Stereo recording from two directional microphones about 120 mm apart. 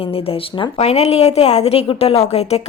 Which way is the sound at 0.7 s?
65° left (ahead or behind).